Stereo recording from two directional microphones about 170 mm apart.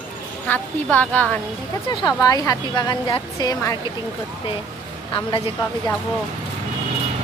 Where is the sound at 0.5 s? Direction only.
10° left (ahead or behind).